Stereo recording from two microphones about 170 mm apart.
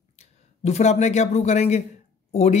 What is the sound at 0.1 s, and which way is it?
A man's voice, 40° left (ahead or behind).